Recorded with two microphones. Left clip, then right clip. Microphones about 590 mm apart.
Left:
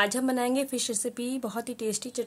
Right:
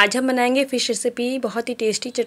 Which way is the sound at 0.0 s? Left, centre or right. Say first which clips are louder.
Right 9 dB; left.